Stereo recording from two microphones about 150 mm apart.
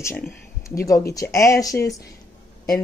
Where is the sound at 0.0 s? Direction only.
15° left (ahead or behind).